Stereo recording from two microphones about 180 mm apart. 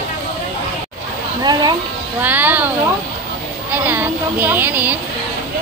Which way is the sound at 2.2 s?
10° right (ahead or behind).